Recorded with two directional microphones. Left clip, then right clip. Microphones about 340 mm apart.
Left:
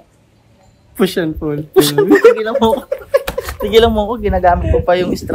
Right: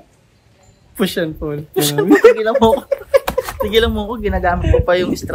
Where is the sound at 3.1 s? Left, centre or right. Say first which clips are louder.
Right 1 dB; centre.